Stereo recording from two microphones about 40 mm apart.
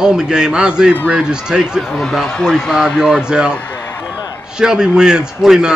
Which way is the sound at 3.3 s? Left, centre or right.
Right.